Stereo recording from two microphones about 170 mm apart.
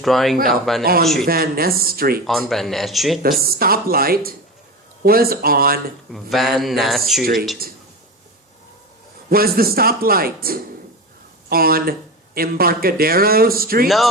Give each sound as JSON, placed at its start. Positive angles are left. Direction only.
{"t": 0.0, "sound": "speech", "side_deg": 0}
{"t": 1.3, "sound": "speech", "side_deg": -60}
{"t": 2.2, "sound": "speech", "side_deg": 0}
{"t": 3.4, "sound": "speech", "side_deg": -60}
{"t": 6.1, "sound": "speech", "side_deg": 0}
{"t": 7.6, "sound": "speech", "side_deg": -60}
{"t": 9.3, "sound": "speech", "side_deg": -60}
{"t": 13.8, "sound": "speech", "side_deg": 0}